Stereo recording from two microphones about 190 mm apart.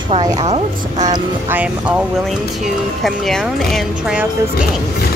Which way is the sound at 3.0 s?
Centre (ahead or behind).